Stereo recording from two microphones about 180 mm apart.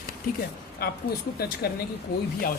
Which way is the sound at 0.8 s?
60° left (ahead or behind).